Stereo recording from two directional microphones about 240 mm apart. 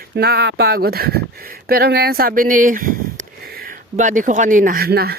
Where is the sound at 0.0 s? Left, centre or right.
Right.